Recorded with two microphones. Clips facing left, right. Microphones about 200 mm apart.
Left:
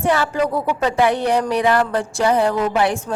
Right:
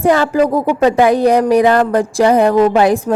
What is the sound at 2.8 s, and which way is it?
Speech, 90° right.